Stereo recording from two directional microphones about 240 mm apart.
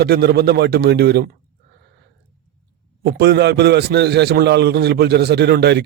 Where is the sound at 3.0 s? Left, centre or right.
Right.